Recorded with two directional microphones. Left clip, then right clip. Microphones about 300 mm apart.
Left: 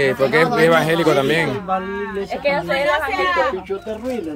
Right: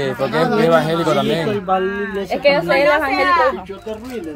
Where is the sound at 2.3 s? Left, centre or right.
Right.